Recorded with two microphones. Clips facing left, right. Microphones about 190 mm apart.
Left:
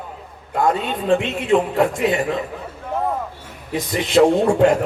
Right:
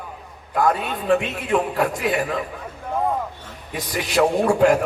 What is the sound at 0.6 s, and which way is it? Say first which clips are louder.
A man's voice: left 2 dB; 25° left (ahead or behind).